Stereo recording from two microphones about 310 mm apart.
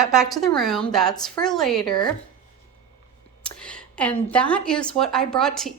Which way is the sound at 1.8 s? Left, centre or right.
Centre.